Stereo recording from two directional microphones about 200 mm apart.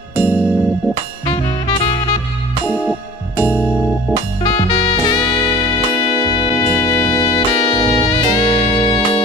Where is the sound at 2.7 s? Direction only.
5° right (ahead or behind).